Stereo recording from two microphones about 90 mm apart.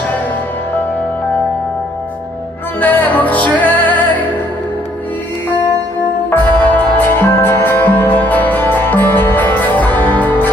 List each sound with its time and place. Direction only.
2.8 s music: 20° left (ahead or behind)
6.3 s music: 20° left (ahead or behind)